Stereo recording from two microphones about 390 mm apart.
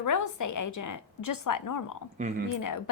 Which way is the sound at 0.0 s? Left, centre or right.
Left.